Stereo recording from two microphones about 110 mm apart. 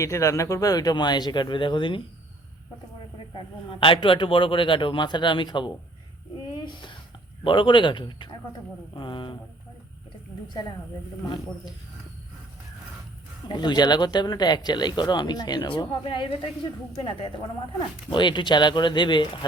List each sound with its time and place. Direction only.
0.0 s speech: 25° left (ahead or behind); by 2.0 s 45° left (ahead or behind)
3.2 s a man's voice: 55° left (ahead or behind)
7.4 s a man's voice: 50° left (ahead or behind)
13.5 s speech: 40° left (ahead or behind)
18.1 s a man's voice: 45° left (ahead or behind)